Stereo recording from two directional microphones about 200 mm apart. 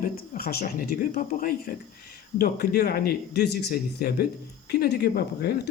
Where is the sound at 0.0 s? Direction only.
50° left (ahead or behind).